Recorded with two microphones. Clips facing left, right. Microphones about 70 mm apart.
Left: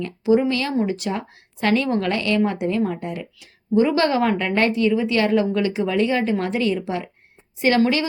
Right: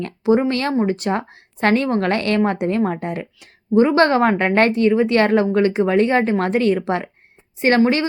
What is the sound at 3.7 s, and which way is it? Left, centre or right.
A woman's voice, right.